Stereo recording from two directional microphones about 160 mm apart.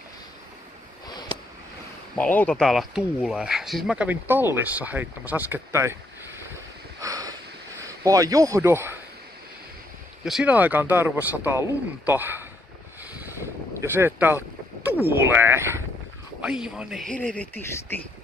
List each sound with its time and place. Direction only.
1.0 s a sound: 25° left (ahead or behind)
2.1 s speech: 10° left (ahead or behind)
2.6 s speech: centre (ahead or behind); by 5.9 s 15° right (ahead or behind)
7.0 s a sound: 20° right (ahead or behind)
7.8 s speech: 20° right (ahead or behind)
10.2 s speech: 5° right (ahead or behind)
13.4 s boat: 15° right (ahead or behind)
15.0 s speech: 15° right (ahead or behind)
17.1 s speech: 10° left (ahead or behind)